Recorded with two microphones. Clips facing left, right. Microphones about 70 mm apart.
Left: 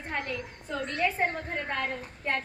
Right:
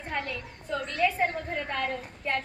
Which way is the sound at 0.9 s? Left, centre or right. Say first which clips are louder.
Right 2 dB; left.